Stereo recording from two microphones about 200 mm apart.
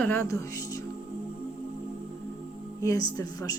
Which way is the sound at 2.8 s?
15° left (ahead or behind).